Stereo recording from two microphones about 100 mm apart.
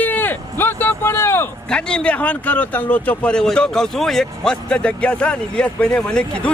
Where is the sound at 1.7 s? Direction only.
10° left (ahead or behind).